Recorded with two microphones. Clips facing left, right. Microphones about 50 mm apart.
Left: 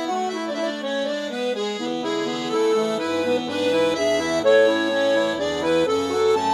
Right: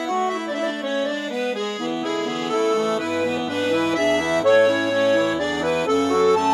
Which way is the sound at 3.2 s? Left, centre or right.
Right.